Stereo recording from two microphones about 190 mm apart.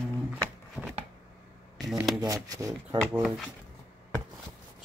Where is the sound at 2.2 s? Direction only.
15° right (ahead or behind).